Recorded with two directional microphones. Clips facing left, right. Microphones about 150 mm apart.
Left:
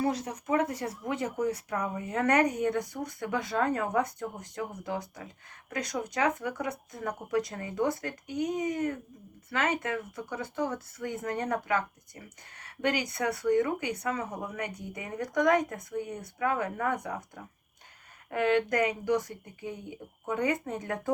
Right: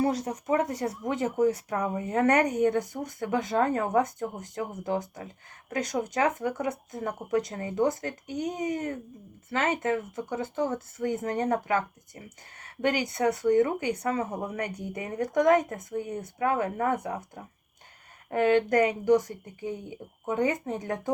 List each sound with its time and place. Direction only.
0.0 s speech: 30° right (ahead or behind)
20.2 s speech: 30° right (ahead or behind)